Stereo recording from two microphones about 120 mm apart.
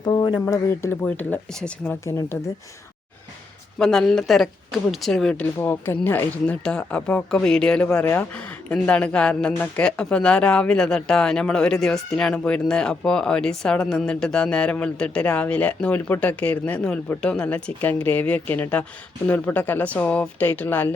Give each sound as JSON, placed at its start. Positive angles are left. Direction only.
{"t": 0.0, "sound": "a sound", "side_deg": 35}
{"t": 0.5, "sound": "speech", "side_deg": 25}
{"t": 2.0, "sound": "speech", "side_deg": 20}
{"t": 3.8, "sound": "speech", "side_deg": 5}
{"t": 7.9, "sound": "speech", "side_deg": 25}
{"t": 8.7, "sound": "speech", "side_deg": 10}